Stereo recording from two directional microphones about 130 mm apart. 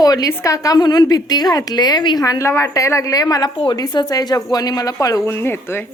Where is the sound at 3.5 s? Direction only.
40° left (ahead or behind).